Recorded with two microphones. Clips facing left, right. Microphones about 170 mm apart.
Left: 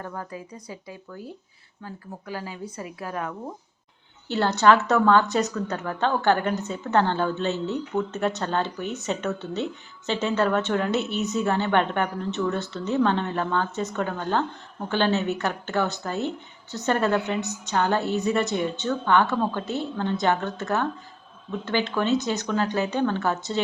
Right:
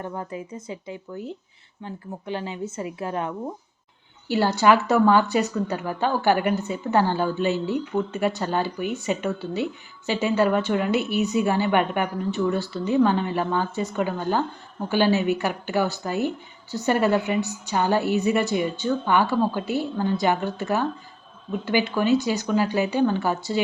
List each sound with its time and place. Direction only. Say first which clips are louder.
0.0 s speech: right 3 dB; 20° right (ahead or behind)
4.3 s a woman's voice: right 1 dB; 10° right (ahead or behind)